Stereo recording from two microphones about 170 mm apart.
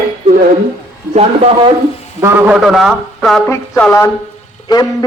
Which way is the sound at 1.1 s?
35° right (ahead or behind).